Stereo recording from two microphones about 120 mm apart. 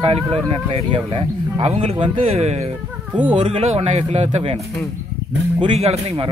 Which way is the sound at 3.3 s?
50° right (ahead or behind).